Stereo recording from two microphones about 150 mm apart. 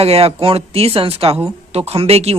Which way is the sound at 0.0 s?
40° right (ahead or behind).